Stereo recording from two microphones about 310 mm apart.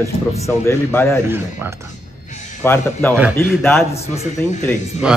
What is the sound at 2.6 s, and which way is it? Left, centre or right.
A man's voice, centre.